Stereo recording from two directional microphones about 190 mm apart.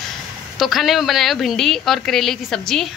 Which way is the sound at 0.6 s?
Centre (ahead or behind).